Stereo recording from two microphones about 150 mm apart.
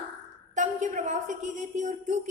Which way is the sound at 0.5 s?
55° right (ahead or behind).